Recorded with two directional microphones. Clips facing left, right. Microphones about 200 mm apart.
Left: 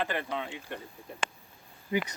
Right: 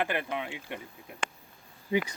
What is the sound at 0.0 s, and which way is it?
Speech, 10° right (ahead or behind).